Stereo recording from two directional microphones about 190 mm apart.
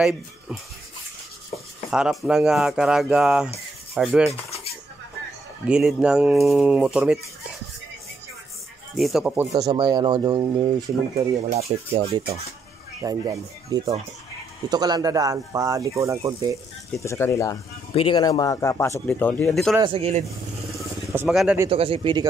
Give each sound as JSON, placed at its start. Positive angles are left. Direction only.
{"t": 1.9, "sound": "speech", "side_deg": -5}
{"t": 3.9, "sound": "a sound", "side_deg": -5}
{"t": 5.7, "sound": "speech", "side_deg": -5}
{"t": 8.9, "sound": "speech", "side_deg": 0}
{"t": 9.5, "sound": "speech", "side_deg": -25}
{"t": 11.1, "sound": "speech", "side_deg": -35}
{"t": 13.0, "sound": "speech", "side_deg": -20}
{"t": 17.0, "sound": "speech", "side_deg": 15}
{"t": 17.9, "sound": "speech", "side_deg": 25}
{"t": 19.8, "sound": "speech", "side_deg": -30}
{"t": 21.1, "sound": "speech", "side_deg": -10}
{"t": 21.6, "sound": "speech", "side_deg": -30}